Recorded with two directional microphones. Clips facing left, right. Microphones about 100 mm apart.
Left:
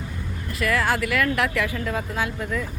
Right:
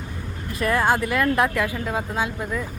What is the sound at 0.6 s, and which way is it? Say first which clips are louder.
Speech: right 2 dB; 25° right (ahead or behind).